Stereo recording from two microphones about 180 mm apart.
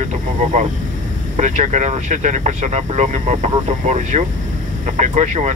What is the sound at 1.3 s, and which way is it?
Speech, 40° right (ahead or behind).